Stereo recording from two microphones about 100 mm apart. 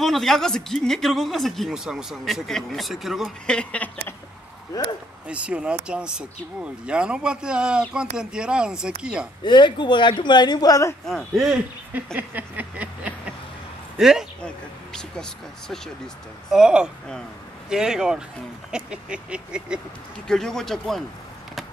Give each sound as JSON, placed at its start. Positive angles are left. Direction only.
{"t": 0.0, "sound": "a man's voice", "side_deg": 0}
{"t": 3.4, "sound": "speech", "side_deg": 10}
{"t": 5.3, "sound": "speech", "side_deg": -10}
{"t": 9.4, "sound": "speech", "side_deg": 50}
{"t": 11.1, "sound": "a man's voice", "side_deg": 0}
{"t": 11.9, "sound": "a sound", "side_deg": -15}
{"t": 13.9, "sound": "speech", "side_deg": -5}
{"t": 14.4, "sound": "a sound", "side_deg": 5}
{"t": 16.5, "sound": "speech", "side_deg": -5}
{"t": 20.2, "sound": "a man's voice", "side_deg": 5}